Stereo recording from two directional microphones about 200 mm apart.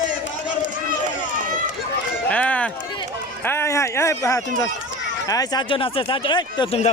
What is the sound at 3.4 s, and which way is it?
Speech, 10° left (ahead or behind).